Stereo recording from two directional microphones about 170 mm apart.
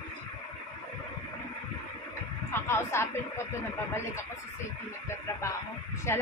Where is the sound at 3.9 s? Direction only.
15° left (ahead or behind).